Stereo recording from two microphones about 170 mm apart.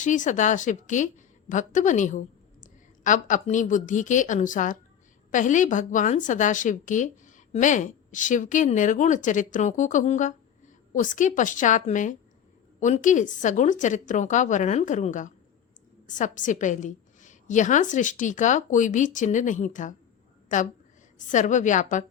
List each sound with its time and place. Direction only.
0.0 s a woman's voice: 45° left (ahead or behind)